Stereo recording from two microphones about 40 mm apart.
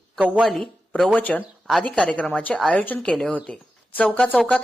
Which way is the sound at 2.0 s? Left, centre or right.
Left.